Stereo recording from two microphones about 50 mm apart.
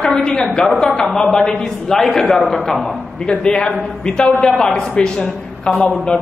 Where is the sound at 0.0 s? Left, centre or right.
Centre.